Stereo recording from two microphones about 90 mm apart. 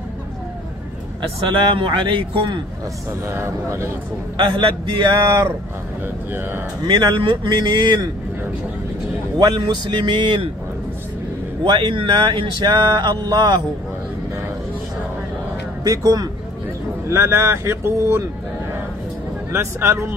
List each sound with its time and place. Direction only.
1.7 s a man's voice: 70° right (ahead or behind)
3.1 s speech: 35° right (ahead or behind)
4.4 s speech: 65° right (ahead or behind)
6.0 s speech: 25° right (ahead or behind)
6.9 s speech: 60° right (ahead or behind)
9.4 s speech: 55° right (ahead or behind)
11.6 s speech: 60° right (ahead or behind)
15.8 s speech: 40° right (ahead or behind)
17.1 s speech: 30° right (ahead or behind)
19.5 s speech: 30° right (ahead or behind)